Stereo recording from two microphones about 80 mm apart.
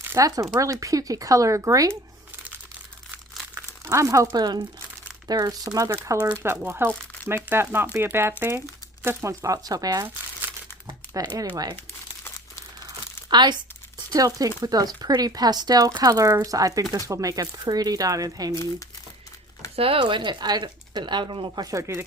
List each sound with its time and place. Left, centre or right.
0.2 s speech: right
3.8 s speech: right
4.3 s speech: right
5.3 s speech: right
6.3 s speech: right
9.0 s speech: right
11.1 s speech: right
13.3 s speech: right
14.1 s speech: right
19.6 s a sound: left
20.0 s speech: right
21.7 s speech: right